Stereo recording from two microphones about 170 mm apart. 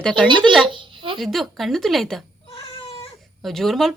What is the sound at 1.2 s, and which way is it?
Speech, centre (ahead or behind).